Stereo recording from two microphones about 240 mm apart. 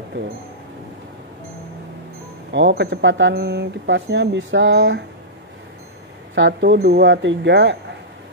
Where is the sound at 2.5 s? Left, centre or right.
Right.